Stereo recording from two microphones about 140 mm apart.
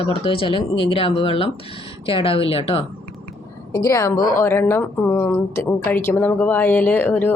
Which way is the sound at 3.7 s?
25° left (ahead or behind).